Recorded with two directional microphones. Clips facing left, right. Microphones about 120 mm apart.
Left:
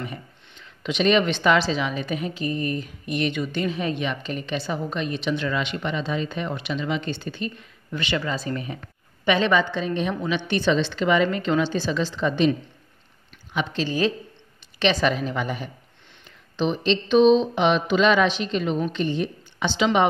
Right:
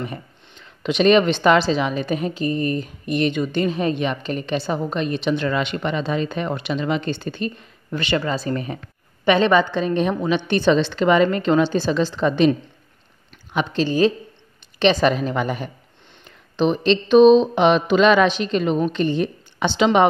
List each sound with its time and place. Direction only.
0.8 s a woman's voice: 50° right (ahead or behind)
13.8 s a woman's voice: 30° right (ahead or behind)
14.8 s a woman's voice: 45° right (ahead or behind)